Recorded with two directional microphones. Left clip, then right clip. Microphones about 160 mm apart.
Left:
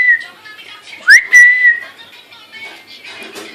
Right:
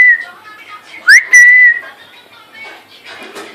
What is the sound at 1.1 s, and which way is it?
Whistling, 40° left (ahead or behind).